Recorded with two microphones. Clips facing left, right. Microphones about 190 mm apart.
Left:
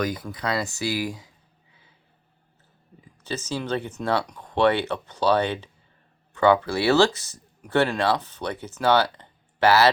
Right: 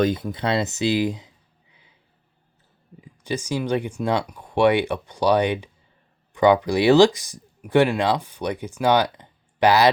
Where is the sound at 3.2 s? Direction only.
15° right (ahead or behind).